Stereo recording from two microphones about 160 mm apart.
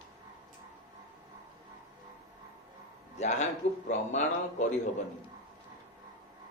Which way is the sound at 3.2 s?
45° left (ahead or behind).